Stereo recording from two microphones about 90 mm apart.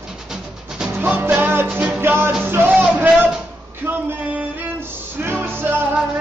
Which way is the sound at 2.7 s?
15° right (ahead or behind).